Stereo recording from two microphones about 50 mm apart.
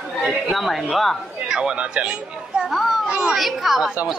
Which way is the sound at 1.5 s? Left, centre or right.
Centre.